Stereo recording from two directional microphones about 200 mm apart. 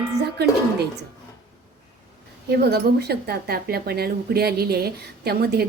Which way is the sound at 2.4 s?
55° right (ahead or behind).